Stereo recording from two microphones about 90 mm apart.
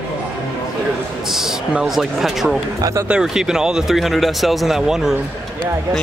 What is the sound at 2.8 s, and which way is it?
Speech, 35° right (ahead or behind).